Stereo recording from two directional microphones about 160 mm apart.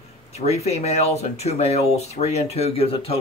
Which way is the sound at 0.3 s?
40° left (ahead or behind).